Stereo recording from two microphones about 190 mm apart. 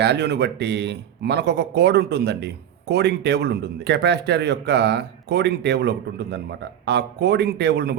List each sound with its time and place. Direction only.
0.0 s a man's voice: 60° right (ahead or behind)